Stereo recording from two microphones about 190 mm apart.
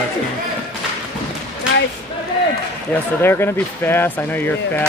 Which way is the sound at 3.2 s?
10° left (ahead or behind).